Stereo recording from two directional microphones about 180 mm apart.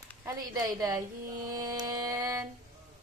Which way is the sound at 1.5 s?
20° right (ahead or behind).